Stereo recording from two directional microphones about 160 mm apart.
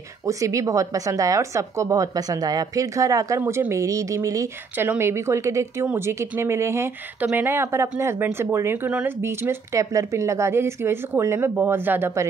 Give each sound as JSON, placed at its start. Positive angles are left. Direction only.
{"t": 0.2, "sound": "speech", "side_deg": -20}